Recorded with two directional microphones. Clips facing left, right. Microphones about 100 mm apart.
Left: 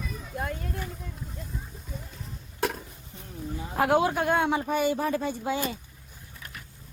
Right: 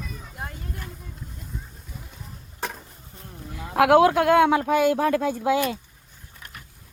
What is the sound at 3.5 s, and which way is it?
Speech, 75° right (ahead or behind).